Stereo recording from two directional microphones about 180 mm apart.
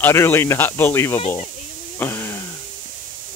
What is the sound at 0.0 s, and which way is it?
Speech, 15° left (ahead or behind).